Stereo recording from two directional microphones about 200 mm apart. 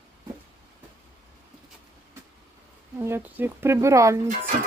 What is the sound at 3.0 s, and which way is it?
Speech, 10° right (ahead or behind).